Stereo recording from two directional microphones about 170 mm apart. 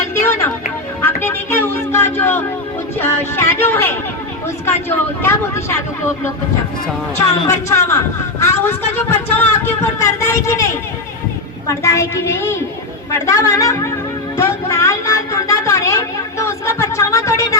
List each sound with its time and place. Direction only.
0.1 s music: 15° left (ahead or behind)
1.0 s a sound: 15° left (ahead or behind)
4.6 s speech: 15° left (ahead or behind)
7.2 s speech: 15° left (ahead or behind)
11.7 s speech: 15° left (ahead or behind)
14.3 s a sound: 15° left (ahead or behind)